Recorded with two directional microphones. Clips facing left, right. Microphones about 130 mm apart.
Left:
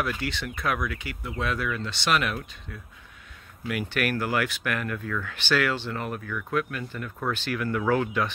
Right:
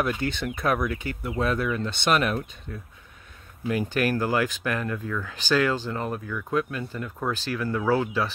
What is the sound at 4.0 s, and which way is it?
Speech, 30° right (ahead or behind).